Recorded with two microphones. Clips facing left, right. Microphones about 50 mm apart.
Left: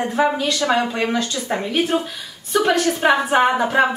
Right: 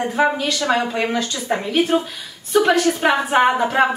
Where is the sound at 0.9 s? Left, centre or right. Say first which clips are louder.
Even; centre.